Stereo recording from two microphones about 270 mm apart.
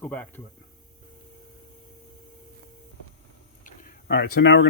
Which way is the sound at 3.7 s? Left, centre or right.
Left.